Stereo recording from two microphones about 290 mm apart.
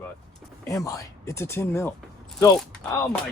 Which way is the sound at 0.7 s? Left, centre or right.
Centre.